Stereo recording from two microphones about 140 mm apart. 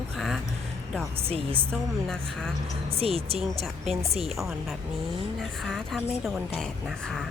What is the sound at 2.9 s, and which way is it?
Speech, 45° right (ahead or behind).